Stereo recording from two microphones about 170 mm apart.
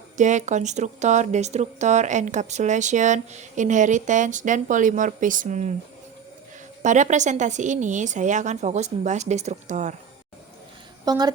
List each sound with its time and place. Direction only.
0.2 s speech: 45° right (ahead or behind)
6.8 s speech: 45° right (ahead or behind)
11.0 s speech: 25° right (ahead or behind)